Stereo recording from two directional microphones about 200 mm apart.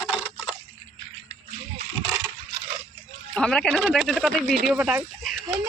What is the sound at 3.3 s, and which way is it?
Speech, 5° left (ahead or behind).